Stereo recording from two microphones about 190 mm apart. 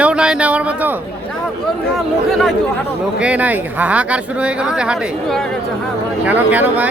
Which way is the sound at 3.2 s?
5° right (ahead or behind).